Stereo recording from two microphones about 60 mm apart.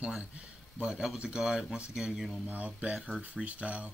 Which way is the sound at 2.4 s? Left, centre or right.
Right.